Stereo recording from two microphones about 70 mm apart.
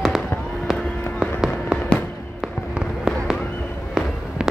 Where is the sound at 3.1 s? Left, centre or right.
Centre.